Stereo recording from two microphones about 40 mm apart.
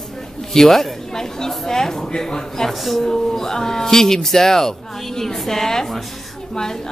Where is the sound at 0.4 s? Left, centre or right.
Centre.